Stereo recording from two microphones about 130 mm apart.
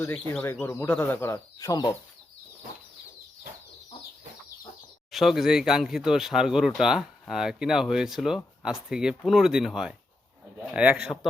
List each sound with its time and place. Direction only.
0.1 s speech: 10° left (ahead or behind); by 2.0 s 25° left (ahead or behind)
5.1 s speech: centre (ahead or behind)